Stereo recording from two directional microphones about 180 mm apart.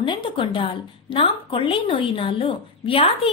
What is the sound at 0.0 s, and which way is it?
A woman's voice, 25° left (ahead or behind).